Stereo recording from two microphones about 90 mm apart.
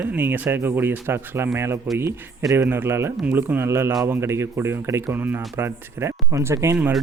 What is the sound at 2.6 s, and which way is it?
Speech, 25° right (ahead or behind).